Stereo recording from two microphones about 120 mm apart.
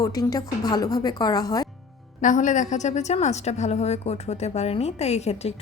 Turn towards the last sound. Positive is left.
turn(degrees=60)  # may be behind; listen again after turning